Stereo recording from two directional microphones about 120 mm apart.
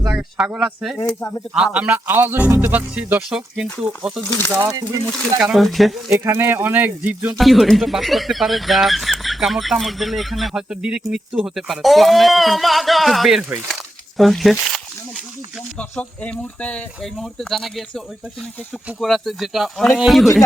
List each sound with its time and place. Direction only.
0.2 s speech: 10° right (ahead or behind)
4.2 s speech: 20° left (ahead or behind)
4.6 s speech: 35° right (ahead or behind)
5.4 s speech: 5° right (ahead or behind)
6.1 s speech: 20° right (ahead or behind)
7.3 s speech: centre (ahead or behind)
13.7 s a sound: centre (ahead or behind)
15.8 s speech: 10° left (ahead or behind)